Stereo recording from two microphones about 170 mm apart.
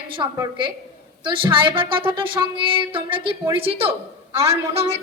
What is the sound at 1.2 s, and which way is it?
A woman's voice, 30° right (ahead or behind).